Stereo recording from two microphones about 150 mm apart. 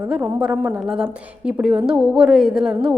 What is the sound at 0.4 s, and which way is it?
A woman's voice, 10° right (ahead or behind).